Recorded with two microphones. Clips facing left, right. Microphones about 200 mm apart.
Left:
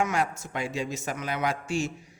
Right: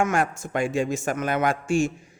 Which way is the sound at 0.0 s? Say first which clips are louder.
Right 4 dB; 50° right (ahead or behind).